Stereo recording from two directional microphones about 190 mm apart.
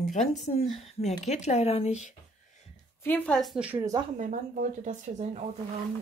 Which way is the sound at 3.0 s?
10° left (ahead or behind).